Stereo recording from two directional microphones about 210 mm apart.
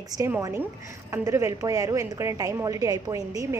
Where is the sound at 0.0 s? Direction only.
15° right (ahead or behind).